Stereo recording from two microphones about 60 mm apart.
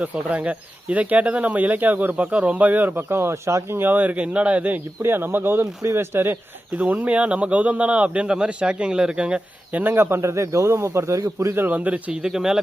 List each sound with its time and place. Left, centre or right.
0.0 s speech: right
3.2 s speech: right
5.0 s speech: right
6.7 s speech: right
9.8 s speech: right
11.5 s speech: right; by 12.5 s centre